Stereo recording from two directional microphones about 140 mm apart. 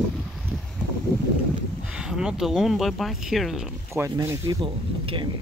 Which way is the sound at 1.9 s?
5° right (ahead or behind).